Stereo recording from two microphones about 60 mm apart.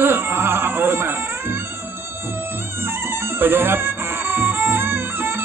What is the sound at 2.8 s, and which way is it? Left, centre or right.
Music, right.